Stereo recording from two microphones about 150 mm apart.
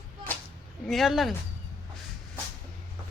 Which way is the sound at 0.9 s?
Centre (ahead or behind).